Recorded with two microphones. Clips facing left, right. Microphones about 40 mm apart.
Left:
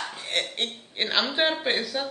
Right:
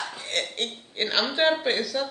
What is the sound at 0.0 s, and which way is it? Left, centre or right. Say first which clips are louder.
Speech: even; centre.